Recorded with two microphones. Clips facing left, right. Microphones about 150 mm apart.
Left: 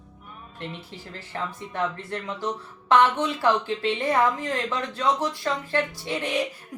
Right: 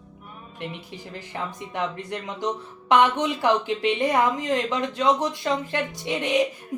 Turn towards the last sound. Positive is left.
turn(degrees=-20)  # may be behind; listen again after turning